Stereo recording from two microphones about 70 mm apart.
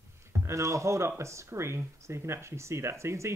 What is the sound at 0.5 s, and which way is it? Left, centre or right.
A man's voice, right.